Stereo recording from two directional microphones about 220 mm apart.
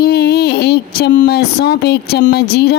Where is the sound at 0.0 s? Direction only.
45° left (ahead or behind).